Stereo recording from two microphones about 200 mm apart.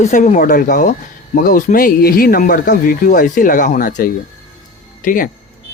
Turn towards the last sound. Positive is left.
turn(degrees=40)  # may be behind; listen again after turning